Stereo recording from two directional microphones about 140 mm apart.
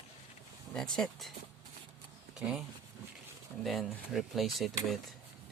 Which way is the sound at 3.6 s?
Centre (ahead or behind).